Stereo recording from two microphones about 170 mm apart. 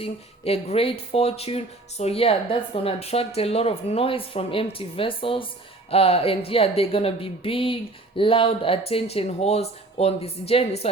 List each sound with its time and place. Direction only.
0.0 s speech: 35° left (ahead or behind)